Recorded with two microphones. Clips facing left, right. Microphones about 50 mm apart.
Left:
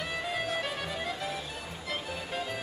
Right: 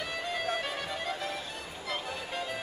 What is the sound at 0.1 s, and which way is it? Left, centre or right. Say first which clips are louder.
Music: even; centre.